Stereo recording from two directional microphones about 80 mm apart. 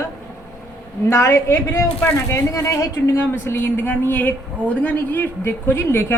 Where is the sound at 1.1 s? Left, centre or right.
Left.